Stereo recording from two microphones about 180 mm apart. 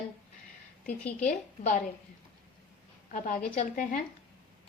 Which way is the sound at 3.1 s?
45° left (ahead or behind).